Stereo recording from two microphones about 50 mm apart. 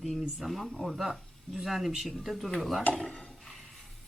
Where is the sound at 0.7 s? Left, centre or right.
Centre.